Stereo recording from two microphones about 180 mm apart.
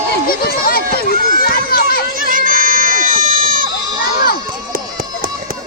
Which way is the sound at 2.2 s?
50° right (ahead or behind).